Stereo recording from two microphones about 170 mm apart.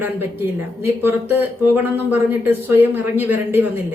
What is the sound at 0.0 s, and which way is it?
Speech, 10° right (ahead or behind).